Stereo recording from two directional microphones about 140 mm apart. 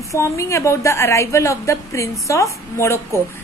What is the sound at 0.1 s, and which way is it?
A woman's voice, 20° left (ahead or behind).